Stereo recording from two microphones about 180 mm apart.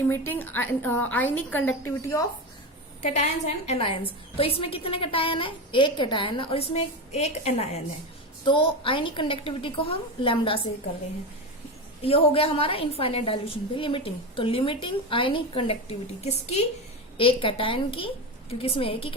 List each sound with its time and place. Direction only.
0.1 s a woman's voice: 10° left (ahead or behind)
3.0 s a woman's voice: 40° left (ahead or behind)
12.0 s a woman's voice: 30° left (ahead or behind)